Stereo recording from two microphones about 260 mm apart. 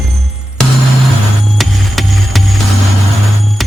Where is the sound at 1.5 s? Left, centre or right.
Centre.